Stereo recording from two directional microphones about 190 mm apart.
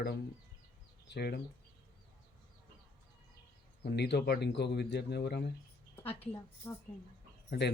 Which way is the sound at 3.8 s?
60° left (ahead or behind).